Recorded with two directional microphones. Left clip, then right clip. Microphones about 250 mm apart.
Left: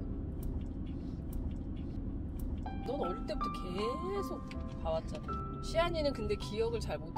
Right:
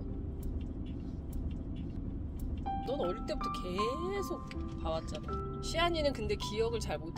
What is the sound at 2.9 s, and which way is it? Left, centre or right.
Speech, right.